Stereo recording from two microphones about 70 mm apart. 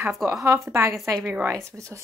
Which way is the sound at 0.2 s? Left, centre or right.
Right.